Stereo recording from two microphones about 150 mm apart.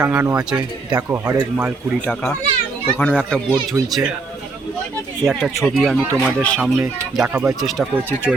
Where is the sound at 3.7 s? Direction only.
20° right (ahead or behind).